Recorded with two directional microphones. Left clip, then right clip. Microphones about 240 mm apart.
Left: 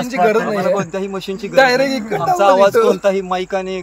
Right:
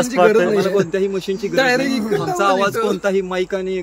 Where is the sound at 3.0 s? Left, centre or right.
Centre.